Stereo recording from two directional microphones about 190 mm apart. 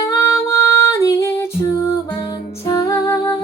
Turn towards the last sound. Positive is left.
turn(degrees=15)  # may be behind; listen again after turning